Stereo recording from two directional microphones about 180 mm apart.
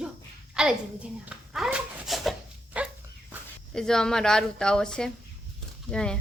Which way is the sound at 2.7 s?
5° right (ahead or behind).